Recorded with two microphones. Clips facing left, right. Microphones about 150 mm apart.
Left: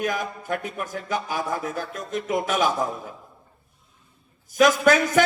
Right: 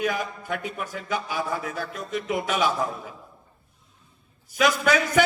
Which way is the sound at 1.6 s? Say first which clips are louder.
Left 2 dB; 45° left (ahead or behind).